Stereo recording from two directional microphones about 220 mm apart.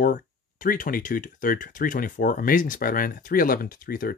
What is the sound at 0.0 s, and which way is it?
Speech, 40° left (ahead or behind).